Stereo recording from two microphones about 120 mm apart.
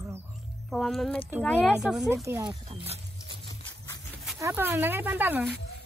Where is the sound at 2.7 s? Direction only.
60° right (ahead or behind).